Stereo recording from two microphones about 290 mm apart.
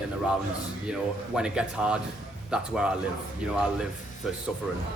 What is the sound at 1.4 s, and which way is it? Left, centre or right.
Speech, centre.